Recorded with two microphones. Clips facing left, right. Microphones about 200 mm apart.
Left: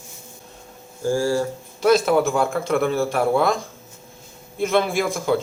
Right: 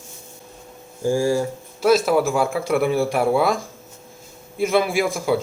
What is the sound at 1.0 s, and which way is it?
Speech, 20° right (ahead or behind).